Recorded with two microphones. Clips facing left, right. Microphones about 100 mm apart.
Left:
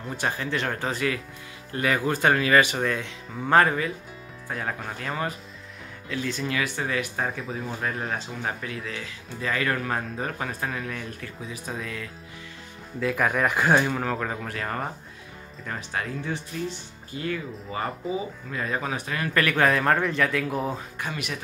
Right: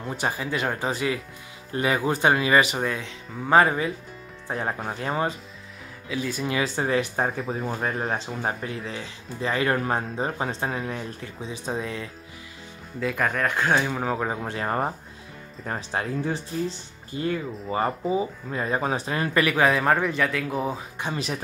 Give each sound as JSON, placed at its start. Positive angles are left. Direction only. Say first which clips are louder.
{"t": 0.0, "sound": "speech", "louder": "right 1 dB", "side_deg": -15}
{"t": 4.5, "sound": "speech", "louder": "right 3 dB", "side_deg": -25}
{"t": 6.0, "sound": "speech", "louder": "right 1 dB", "side_deg": -10}
{"t": 6.5, "sound": "speech", "louder": "right 6 dB", "side_deg": -30}
{"t": 13.0, "sound": "speech", "louder": "left 1 dB", "side_deg": 0}
{"t": 13.9, "sound": "speech", "louder": "right 2 dB", "side_deg": -10}
{"t": 19.3, "sound": "speech", "louder": "right 1 dB", "side_deg": -5}
{"t": 21.0, "sound": "speech", "louder": "right 5 dB", "side_deg": -30}